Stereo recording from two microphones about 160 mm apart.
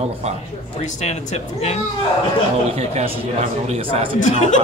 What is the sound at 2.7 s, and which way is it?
Speech, 40° right (ahead or behind).